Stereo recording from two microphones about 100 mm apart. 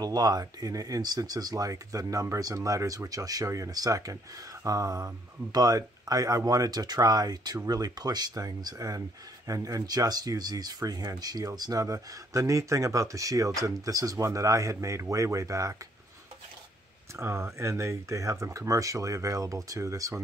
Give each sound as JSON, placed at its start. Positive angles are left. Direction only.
{"t": 0.0, "sound": "speech", "side_deg": -40}
{"t": 17.2, "sound": "speech", "side_deg": -25}